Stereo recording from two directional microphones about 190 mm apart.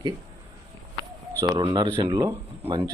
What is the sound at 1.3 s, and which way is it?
Speech, 20° right (ahead or behind).